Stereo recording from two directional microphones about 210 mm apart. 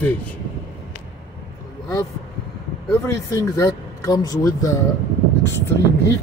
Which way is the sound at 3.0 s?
15° left (ahead or behind).